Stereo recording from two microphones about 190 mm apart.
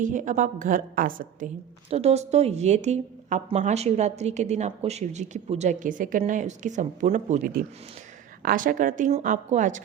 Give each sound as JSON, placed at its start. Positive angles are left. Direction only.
{"t": 0.0, "sound": "a woman's voice", "side_deg": -40}
{"t": 1.9, "sound": "a woman's voice", "side_deg": -35}